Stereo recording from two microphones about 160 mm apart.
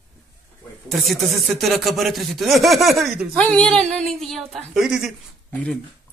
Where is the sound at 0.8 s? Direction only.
Centre (ahead or behind).